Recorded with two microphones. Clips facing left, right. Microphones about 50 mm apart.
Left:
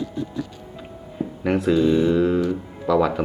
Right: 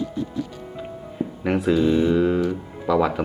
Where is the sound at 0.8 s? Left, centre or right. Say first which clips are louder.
Right 1 dB; centre.